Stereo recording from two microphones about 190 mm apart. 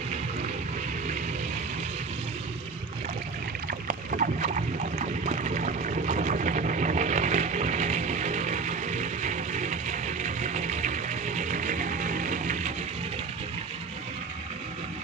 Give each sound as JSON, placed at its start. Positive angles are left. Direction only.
{"t": 3.7, "sound": "boat", "side_deg": -45}